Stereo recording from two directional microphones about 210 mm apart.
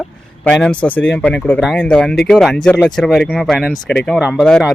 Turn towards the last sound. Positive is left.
turn(degrees=0)  # may be behind; listen again after turning